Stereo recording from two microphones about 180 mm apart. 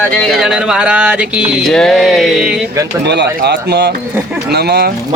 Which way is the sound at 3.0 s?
70° right (ahead or behind).